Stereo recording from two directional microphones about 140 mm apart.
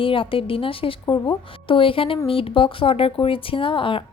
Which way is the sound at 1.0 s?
30° left (ahead or behind).